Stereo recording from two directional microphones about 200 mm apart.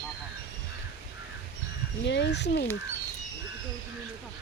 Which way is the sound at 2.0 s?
60° left (ahead or behind).